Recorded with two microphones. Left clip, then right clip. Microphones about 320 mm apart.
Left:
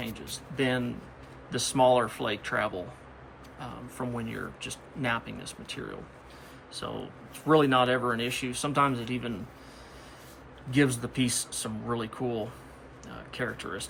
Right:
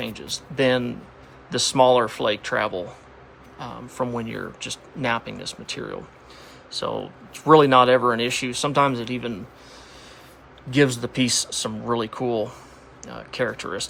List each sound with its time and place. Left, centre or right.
0.0 s speech: centre
10.7 s speech: centre